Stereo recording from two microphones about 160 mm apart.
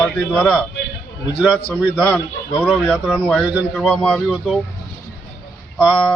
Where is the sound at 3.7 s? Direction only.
5° left (ahead or behind).